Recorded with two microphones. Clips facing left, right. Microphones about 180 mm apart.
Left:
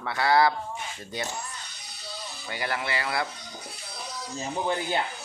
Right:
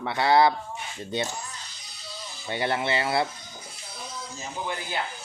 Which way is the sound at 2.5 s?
25° right (ahead or behind).